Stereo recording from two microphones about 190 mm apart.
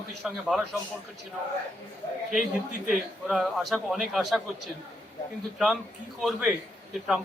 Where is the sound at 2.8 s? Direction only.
5° right (ahead or behind).